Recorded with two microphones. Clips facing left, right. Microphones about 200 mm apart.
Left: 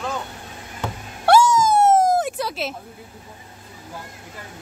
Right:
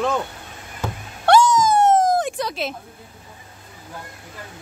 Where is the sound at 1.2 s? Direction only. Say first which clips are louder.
Even; 10° left (ahead or behind).